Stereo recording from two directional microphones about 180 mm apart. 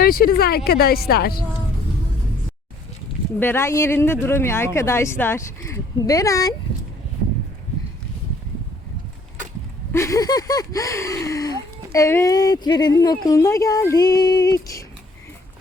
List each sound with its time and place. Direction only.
0.0 s speech: 55° left (ahead or behind)
3.4 s speech: 15° left (ahead or behind)
9.9 s a sound: 15° left (ahead or behind)